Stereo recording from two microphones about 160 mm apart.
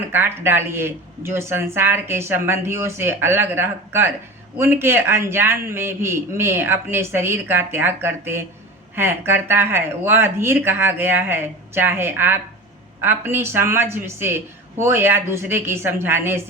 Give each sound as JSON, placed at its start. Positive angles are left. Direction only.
{"t": 0.1, "sound": "speech", "side_deg": -15}